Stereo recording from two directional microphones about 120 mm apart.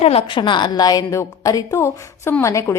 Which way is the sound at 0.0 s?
55° left (ahead or behind).